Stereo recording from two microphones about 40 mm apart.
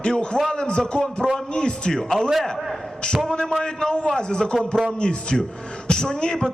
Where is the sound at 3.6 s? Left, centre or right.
Centre.